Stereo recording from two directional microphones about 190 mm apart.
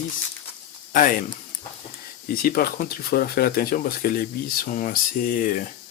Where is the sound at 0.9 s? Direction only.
45° left (ahead or behind).